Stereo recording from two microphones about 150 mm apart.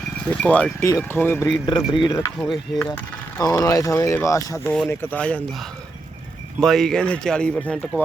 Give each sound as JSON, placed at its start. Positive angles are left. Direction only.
{"t": 0.3, "sound": "speech", "side_deg": 10}
{"t": 1.9, "sound": "speech", "side_deg": 30}
{"t": 2.4, "sound": "speech", "side_deg": 10}
{"t": 3.4, "sound": "speech", "side_deg": 25}
{"t": 4.9, "sound": "speech", "side_deg": 10}
{"t": 6.6, "sound": "speech", "side_deg": 5}